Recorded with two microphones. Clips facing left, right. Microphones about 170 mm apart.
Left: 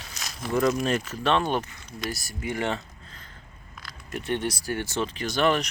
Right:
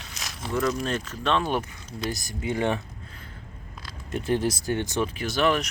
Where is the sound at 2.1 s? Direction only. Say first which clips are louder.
Right 3 dB; 20° right (ahead or behind).